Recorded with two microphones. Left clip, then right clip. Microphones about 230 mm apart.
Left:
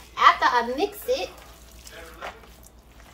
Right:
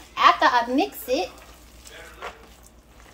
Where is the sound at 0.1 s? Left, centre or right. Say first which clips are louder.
Right 1 dB; right.